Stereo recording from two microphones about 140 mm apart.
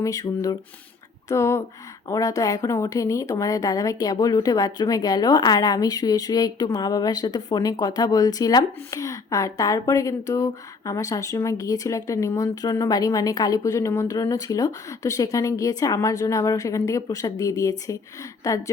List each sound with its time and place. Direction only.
0.0 s speech: 25° left (ahead or behind)